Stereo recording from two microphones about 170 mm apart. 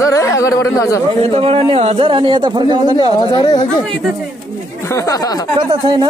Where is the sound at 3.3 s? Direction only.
25° left (ahead or behind).